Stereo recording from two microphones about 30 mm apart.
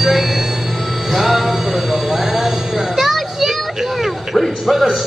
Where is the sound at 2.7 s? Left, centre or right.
Centre.